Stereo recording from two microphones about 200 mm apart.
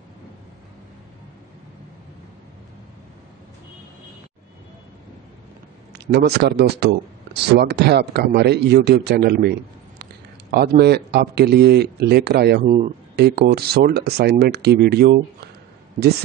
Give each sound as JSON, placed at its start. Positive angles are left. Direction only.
{"t": 5.9, "sound": "a man's voice", "side_deg": -55}
{"t": 12.6, "sound": "speech", "side_deg": -35}
{"t": 13.1, "sound": "a man's voice", "side_deg": -55}